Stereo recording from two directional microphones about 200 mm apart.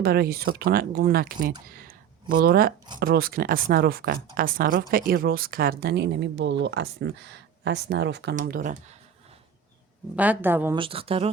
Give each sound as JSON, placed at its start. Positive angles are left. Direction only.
{"t": 0.0, "sound": "speech", "side_deg": -50}
{"t": 8.4, "sound": "speech", "side_deg": -45}
{"t": 10.2, "sound": "speech", "side_deg": -10}
{"t": 10.8, "sound": "speech", "side_deg": -25}